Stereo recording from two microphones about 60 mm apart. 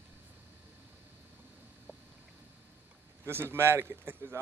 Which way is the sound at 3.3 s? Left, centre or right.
Right.